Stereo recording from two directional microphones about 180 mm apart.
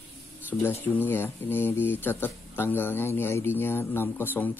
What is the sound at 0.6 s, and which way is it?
Speech, 10° left (ahead or behind).